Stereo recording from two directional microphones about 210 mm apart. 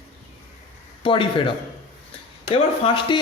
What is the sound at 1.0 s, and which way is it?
A woman's voice, 25° left (ahead or behind).